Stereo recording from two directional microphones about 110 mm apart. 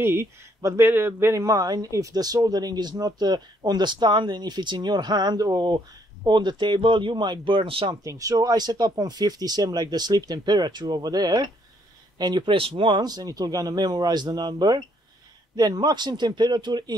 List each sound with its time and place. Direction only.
0.0 s speech: 25° right (ahead or behind); by 7.9 s 55° right (ahead or behind)
7.9 s speech: 30° right (ahead or behind)